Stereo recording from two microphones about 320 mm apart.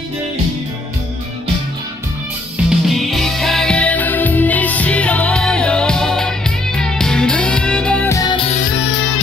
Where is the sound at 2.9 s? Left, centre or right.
Centre.